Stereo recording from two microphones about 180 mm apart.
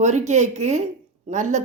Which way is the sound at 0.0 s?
40° right (ahead or behind).